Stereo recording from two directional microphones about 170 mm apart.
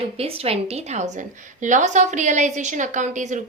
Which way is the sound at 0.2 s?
35° right (ahead or behind).